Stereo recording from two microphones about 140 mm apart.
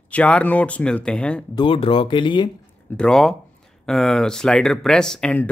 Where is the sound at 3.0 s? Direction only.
5° left (ahead or behind).